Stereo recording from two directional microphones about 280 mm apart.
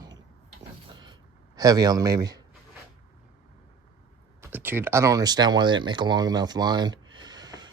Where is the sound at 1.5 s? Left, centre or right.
Centre.